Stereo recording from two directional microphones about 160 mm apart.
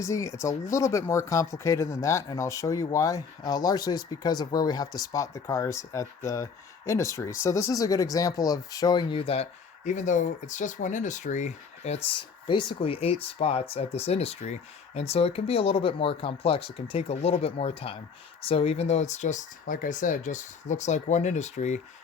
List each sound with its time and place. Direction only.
0.0 s speech: 20° left (ahead or behind); by 21.8 s 45° left (ahead or behind)